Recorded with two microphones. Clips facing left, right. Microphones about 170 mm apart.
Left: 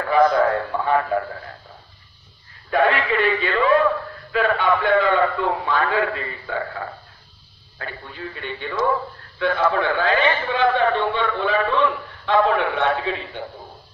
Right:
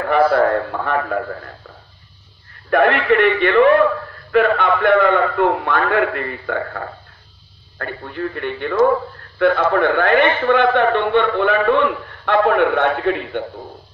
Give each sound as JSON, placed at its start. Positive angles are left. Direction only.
{"t": 0.7, "sound": "a man's voice", "side_deg": -60}
{"t": 2.7, "sound": "a man's voice", "side_deg": -65}
{"t": 7.8, "sound": "a man's voice", "side_deg": -60}